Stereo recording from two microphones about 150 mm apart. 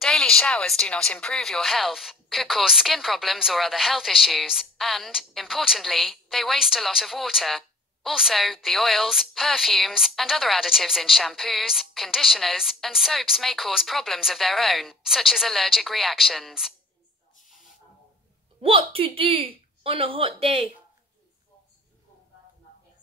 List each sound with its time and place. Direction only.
0.0 s speech: 5° left (ahead or behind)
18.6 s speech: 35° right (ahead or behind)